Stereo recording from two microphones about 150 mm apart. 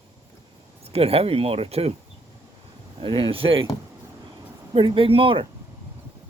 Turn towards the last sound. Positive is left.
turn(degrees=-35)  # may be behind; listen again after turning